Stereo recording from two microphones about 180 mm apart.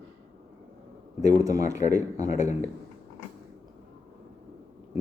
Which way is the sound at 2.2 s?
40° left (ahead or behind).